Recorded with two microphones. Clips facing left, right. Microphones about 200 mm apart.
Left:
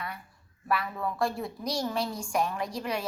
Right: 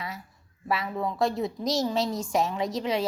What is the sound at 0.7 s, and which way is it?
A woman's voice, 25° right (ahead or behind).